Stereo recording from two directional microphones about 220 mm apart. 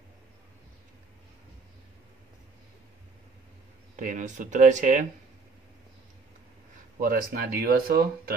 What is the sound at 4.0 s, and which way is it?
Speech, 35° right (ahead or behind).